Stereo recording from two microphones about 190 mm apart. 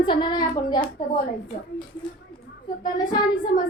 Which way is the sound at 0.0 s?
25° left (ahead or behind).